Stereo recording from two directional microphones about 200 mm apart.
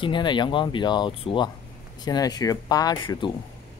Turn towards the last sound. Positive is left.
turn(degrees=20)  # may be behind; listen again after turning